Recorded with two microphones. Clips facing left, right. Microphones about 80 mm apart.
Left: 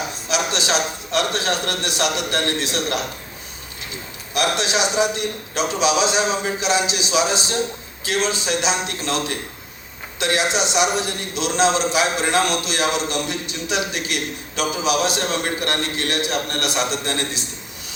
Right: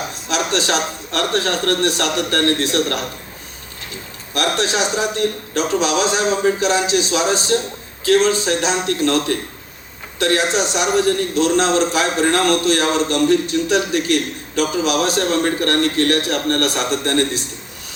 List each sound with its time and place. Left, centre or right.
0.3 s a man's voice: right
4.4 s a man's voice: right